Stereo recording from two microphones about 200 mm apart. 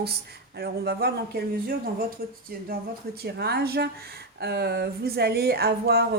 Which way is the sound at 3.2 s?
55° right (ahead or behind).